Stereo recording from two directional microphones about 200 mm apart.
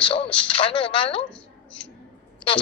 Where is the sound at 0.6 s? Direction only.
25° left (ahead or behind).